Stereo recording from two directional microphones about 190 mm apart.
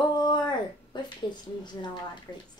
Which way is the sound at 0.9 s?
25° left (ahead or behind).